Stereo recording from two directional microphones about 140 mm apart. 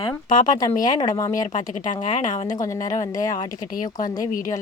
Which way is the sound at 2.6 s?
25° left (ahead or behind).